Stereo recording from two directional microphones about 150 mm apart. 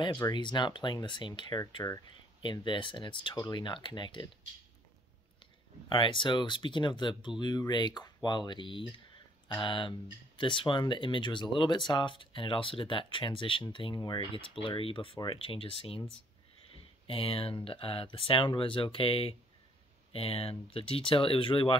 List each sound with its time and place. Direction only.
0.3 s speech: 30° left (ahead or behind)
5.9 s speech: 35° left (ahead or behind)
17.1 s speech: 40° left (ahead or behind)